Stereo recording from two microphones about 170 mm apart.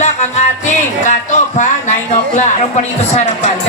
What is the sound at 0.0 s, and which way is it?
Music, 40° left (ahead or behind).